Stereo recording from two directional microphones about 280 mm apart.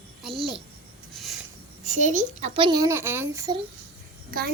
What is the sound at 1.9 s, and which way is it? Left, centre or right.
A child's voice, right.